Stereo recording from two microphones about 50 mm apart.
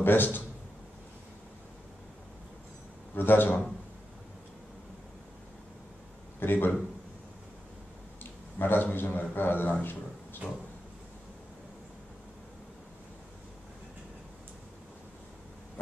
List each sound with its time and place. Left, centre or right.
0.0 s a man's voice: left
3.2 s a man's voice: left
6.4 s a man's voice: left
8.2 s a man's voice: left